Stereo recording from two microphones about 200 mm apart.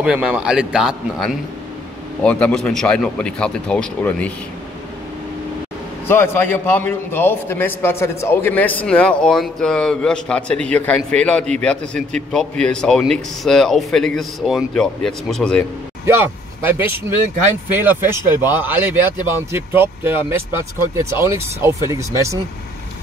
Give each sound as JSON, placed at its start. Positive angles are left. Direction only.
{"t": 0.0, "sound": "a man's voice", "side_deg": -5}
{"t": 6.0, "sound": "a man's voice", "side_deg": 10}
{"t": 16.1, "sound": "speech", "side_deg": -10}